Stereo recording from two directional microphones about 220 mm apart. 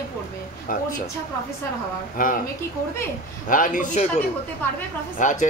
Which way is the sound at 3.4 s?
40° left (ahead or behind).